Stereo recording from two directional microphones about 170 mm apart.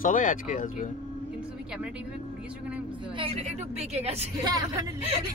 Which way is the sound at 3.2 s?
35° right (ahead or behind).